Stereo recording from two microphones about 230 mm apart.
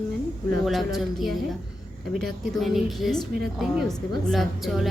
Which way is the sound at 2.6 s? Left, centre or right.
Centre.